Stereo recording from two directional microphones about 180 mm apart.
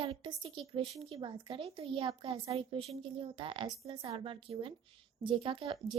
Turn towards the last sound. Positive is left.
turn(degrees=-30)  # may be behind; listen again after turning